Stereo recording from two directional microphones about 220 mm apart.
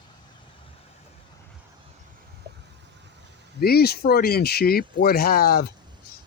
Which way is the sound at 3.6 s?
45° left (ahead or behind).